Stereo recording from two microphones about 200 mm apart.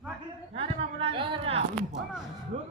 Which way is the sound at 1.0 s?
25° right (ahead or behind).